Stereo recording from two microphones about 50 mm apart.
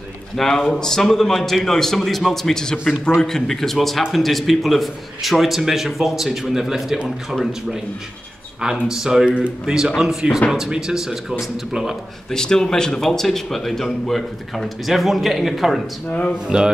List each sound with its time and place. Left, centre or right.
0.4 s a man's voice: centre
8.5 s speech: centre
9.3 s speech: right
9.8 s speech: centre
12.3 s speech: centre
16.1 s speech: left
16.4 s speech: centre